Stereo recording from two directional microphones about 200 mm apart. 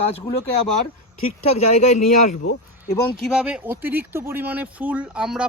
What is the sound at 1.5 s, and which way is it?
Speech, 35° left (ahead or behind).